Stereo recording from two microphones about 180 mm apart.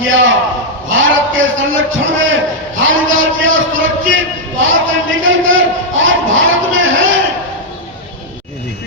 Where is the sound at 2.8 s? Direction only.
90° right.